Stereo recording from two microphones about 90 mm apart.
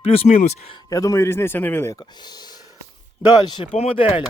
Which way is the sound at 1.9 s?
55° left (ahead or behind).